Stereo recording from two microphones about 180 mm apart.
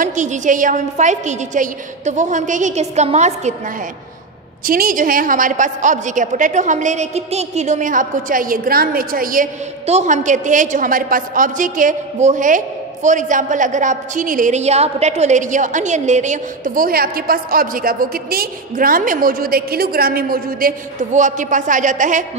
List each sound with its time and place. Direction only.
0.0 s a woman's voice: 45° right (ahead or behind)
4.6 s a woman's voice: 50° right (ahead or behind)